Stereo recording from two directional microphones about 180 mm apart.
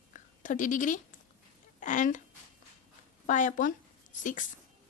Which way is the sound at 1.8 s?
45° left (ahead or behind).